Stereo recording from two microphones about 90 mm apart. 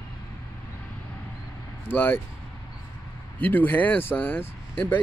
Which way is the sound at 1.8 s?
20° left (ahead or behind).